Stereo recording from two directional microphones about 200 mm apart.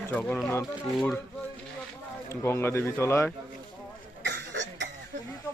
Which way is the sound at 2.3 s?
15° left (ahead or behind).